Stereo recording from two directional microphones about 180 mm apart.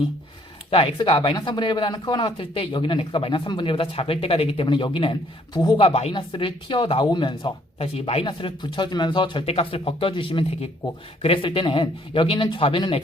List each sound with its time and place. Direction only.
0.7 s speech: 30° left (ahead or behind)